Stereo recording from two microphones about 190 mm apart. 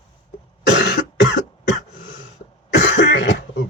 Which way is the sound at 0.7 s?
70° left (ahead or behind).